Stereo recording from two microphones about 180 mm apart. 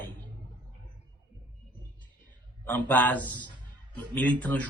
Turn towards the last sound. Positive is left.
turn(degrees=10)  # may be behind; listen again after turning